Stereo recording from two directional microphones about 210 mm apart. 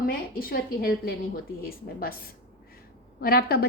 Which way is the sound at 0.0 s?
45° left (ahead or behind).